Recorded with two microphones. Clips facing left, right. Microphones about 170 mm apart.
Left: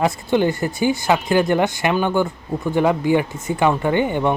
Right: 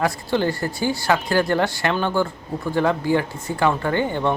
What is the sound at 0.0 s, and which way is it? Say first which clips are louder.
Speech: left 3 dB; 20° left (ahead or behind).